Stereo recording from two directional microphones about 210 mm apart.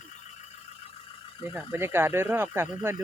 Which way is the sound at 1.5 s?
10° right (ahead or behind).